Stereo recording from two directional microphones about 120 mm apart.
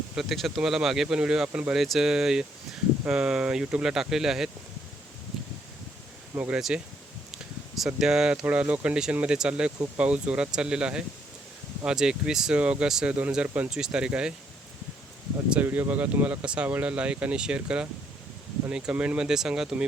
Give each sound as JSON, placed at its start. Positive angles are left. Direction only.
{"t": 0.2, "sound": "speech", "side_deg": 0}
{"t": 6.3, "sound": "speech", "side_deg": -20}
{"t": 6.6, "sound": "speech", "side_deg": -5}
{"t": 15.4, "sound": "speech", "side_deg": -10}